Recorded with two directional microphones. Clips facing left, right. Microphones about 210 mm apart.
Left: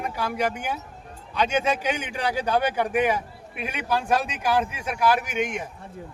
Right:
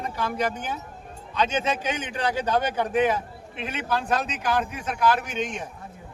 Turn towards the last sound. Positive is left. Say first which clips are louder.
# left 2 dB
turn(degrees=10)  # may be behind; listen again after turning